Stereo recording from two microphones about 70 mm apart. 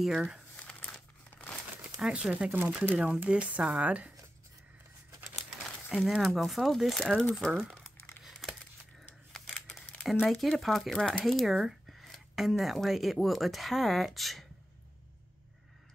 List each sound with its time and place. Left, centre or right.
0.0 s speech: centre
0.6 s crumpling: centre
2.0 s speech: centre
6.1 s speech: centre
7.5 s crumpling: centre
8.2 s crumpling: centre
9.3 s scissors: centre
10.2 s speech: centre